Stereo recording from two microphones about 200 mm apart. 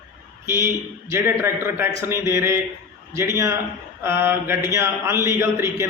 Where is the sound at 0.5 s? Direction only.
15° right (ahead or behind).